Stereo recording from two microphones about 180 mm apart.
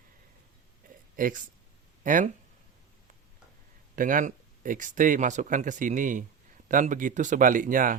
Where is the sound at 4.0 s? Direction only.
50° right (ahead or behind).